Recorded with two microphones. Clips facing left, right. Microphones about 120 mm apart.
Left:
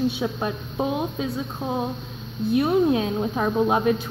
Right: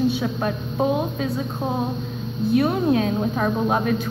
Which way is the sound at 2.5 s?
15° left (ahead or behind).